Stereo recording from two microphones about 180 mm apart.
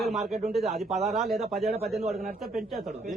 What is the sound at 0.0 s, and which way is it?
A man's voice, centre (ahead or behind).